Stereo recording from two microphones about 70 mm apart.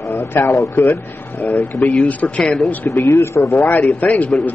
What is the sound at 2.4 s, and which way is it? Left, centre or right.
Speech, centre.